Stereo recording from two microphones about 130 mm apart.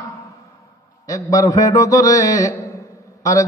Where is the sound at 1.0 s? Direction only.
25° left (ahead or behind).